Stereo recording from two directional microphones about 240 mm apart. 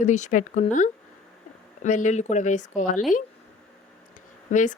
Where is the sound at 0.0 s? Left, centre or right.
Left.